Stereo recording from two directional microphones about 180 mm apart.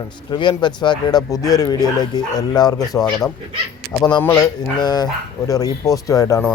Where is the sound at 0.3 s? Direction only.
25° left (ahead or behind).